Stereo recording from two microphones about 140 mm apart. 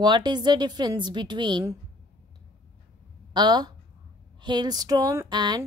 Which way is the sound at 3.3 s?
30° right (ahead or behind).